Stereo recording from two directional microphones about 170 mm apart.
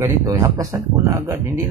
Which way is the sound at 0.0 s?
20° right (ahead or behind).